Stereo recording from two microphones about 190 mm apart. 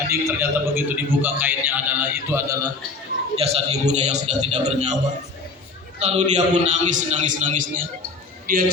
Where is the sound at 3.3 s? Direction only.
35° right (ahead or behind).